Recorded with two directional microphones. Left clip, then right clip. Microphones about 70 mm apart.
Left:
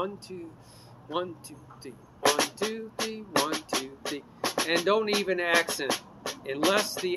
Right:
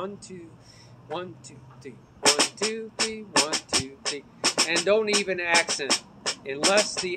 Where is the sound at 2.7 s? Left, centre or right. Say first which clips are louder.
Right 4 dB; left.